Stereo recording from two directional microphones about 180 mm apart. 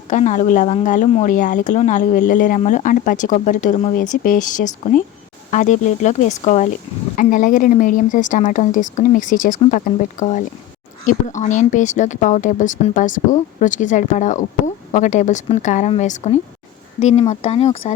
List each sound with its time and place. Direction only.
0.1 s a woman's voice: 45° left (ahead or behind)